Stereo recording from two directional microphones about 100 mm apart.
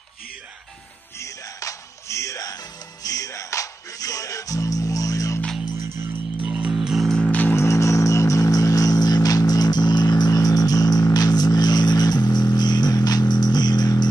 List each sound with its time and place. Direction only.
1.2 s music: 30° left (ahead or behind)
6.4 s music: 10° right (ahead or behind)
7.2 s music: 20° left (ahead or behind); by 14.0 s 45° left (ahead or behind)